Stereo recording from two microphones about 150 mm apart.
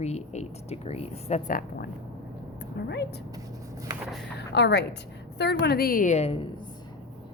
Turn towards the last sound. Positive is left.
turn(degrees=45)  # may be behind; listen again after turning